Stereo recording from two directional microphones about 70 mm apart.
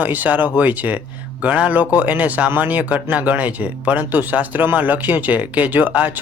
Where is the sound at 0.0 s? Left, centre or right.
Right.